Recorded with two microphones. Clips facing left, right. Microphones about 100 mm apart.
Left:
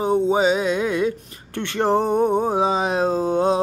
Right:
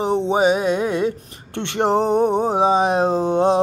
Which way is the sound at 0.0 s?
25° right (ahead or behind).